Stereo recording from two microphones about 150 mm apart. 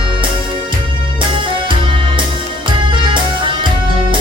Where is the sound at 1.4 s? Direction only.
35° right (ahead or behind).